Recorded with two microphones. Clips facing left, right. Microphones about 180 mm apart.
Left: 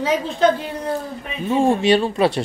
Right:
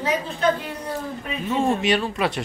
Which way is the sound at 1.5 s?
25° left (ahead or behind).